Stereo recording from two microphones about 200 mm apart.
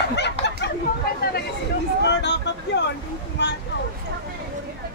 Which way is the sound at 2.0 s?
60° left (ahead or behind).